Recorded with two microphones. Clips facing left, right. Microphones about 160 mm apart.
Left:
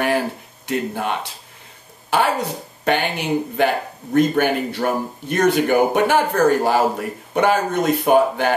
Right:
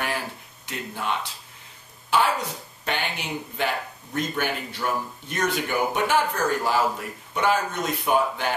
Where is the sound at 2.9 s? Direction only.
55° left (ahead or behind).